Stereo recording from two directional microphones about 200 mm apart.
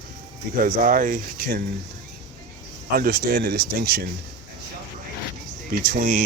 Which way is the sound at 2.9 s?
50° right (ahead or behind).